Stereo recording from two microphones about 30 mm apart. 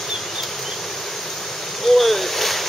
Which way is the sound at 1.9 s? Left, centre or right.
Centre.